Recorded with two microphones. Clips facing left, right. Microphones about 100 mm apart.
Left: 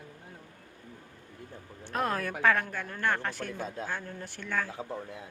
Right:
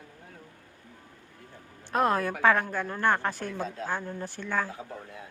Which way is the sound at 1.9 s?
30° right (ahead or behind).